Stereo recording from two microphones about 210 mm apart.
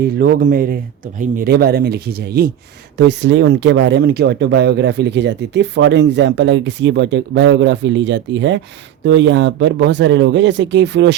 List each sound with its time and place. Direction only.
0.0 s speech: 45° right (ahead or behind)